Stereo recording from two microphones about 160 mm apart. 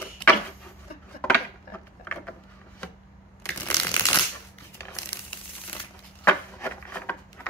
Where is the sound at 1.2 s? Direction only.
10° left (ahead or behind).